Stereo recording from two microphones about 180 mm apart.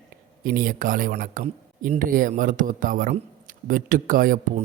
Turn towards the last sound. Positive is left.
turn(degrees=-50)  # may be behind; listen again after turning